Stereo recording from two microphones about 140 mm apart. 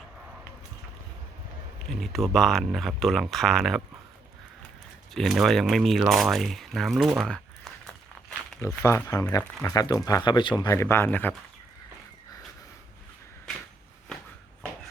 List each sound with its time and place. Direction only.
1.9 s speech: centre (ahead or behind)
5.1 s speech: centre (ahead or behind)
6.0 s a sound: centre (ahead or behind)
8.6 s speech: 20° left (ahead or behind)
10.8 s speech: 15° left (ahead or behind)